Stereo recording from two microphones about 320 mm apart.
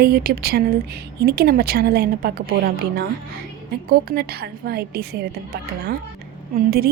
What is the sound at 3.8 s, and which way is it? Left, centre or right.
A woman's voice, right.